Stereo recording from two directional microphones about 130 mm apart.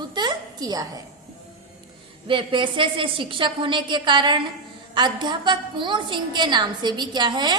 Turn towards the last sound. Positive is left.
turn(degrees=-35)  # may be behind; listen again after turning